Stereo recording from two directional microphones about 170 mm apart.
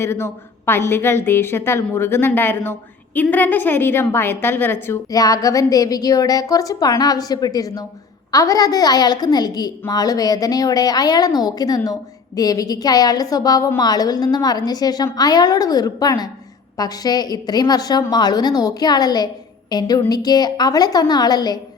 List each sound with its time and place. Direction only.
0.0 s a woman's voice: 15° left (ahead or behind)